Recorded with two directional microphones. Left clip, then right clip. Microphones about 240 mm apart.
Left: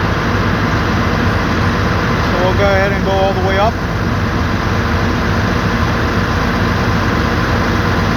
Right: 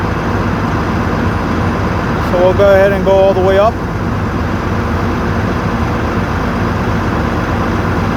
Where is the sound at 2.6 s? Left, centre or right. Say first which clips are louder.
Right 5 dB; right.